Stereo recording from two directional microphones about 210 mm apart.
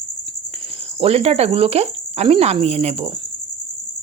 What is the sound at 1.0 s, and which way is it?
Cricket, 30° right (ahead or behind).